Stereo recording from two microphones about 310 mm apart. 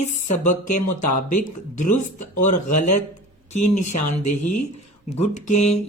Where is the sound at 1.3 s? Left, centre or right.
Left.